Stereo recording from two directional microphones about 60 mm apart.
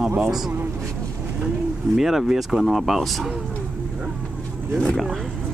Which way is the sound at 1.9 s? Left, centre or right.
Centre.